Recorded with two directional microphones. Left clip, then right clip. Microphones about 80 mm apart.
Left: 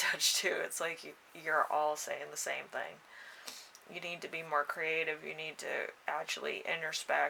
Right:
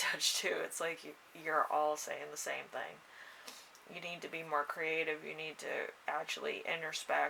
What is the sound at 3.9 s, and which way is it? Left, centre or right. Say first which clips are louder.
Speech: left 2 dB; left.